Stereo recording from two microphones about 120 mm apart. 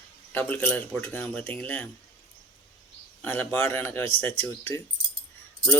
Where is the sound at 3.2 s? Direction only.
15° left (ahead or behind).